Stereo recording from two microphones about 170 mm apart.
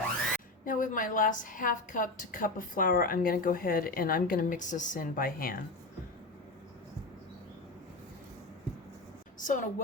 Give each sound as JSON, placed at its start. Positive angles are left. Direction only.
{"t": 0.6, "sound": "a woman's voice", "side_deg": 50}
{"t": 9.4, "sound": "a woman's voice", "side_deg": 45}